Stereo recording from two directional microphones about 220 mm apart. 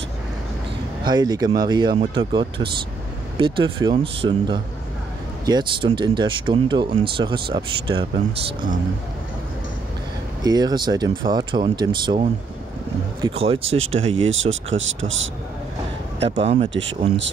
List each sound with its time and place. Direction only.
1.0 s speech: 20° right (ahead or behind)
10.4 s speech: 20° right (ahead or behind)
13.2 s speech: 25° right (ahead or behind)
14.3 s speech: 65° right (ahead or behind)
16.2 s speech: 25° right (ahead or behind)